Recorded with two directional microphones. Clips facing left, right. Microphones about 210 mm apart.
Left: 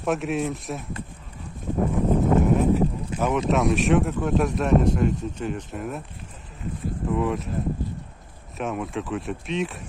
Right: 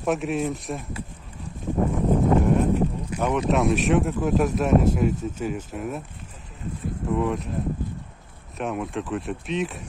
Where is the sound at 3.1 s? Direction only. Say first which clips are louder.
Even; 25° left (ahead or behind).